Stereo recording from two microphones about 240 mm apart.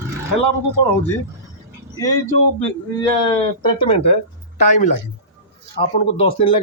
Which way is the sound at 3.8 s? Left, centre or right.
Left.